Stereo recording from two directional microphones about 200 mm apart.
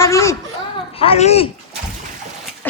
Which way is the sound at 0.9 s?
30° left (ahead or behind).